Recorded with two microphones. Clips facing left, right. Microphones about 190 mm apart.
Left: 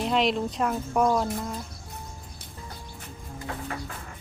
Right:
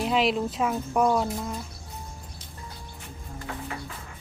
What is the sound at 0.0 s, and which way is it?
Speech, centre (ahead or behind).